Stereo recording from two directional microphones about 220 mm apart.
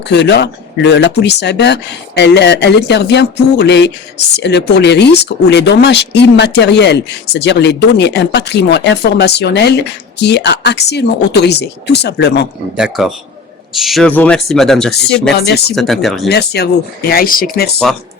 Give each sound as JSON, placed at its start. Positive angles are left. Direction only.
{"t": 0.1, "sound": "speech", "side_deg": 50}
{"t": 12.7, "sound": "speech", "side_deg": 0}
{"t": 15.4, "sound": "speech", "side_deg": 50}
{"t": 15.7, "sound": "speech", "side_deg": 0}
{"t": 16.3, "sound": "speech", "side_deg": 50}